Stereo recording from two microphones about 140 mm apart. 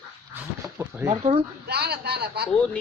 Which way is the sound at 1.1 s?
40° right (ahead or behind).